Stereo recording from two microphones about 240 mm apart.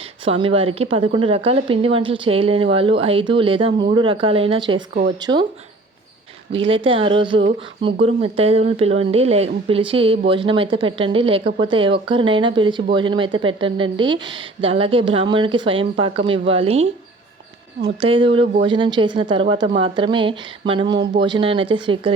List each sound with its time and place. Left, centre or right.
0.3 s speech: right
6.5 s speech: right
18.0 s speech: right